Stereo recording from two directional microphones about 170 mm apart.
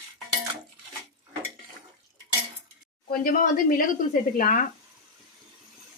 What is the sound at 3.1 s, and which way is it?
Speech, 55° left (ahead or behind).